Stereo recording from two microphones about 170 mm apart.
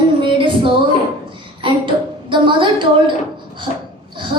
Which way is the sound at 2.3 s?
30° right (ahead or behind).